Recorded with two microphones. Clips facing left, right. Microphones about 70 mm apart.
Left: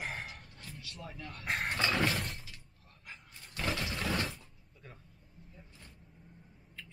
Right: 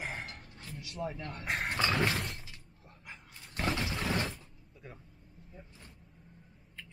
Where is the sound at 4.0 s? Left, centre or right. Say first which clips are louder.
Even; centre.